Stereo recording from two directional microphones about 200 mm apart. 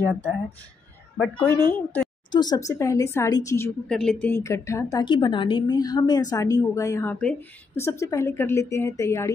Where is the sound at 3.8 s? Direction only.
5° left (ahead or behind).